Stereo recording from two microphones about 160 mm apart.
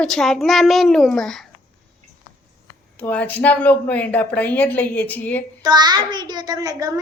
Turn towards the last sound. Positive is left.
turn(degrees=-20)  # may be behind; listen again after turning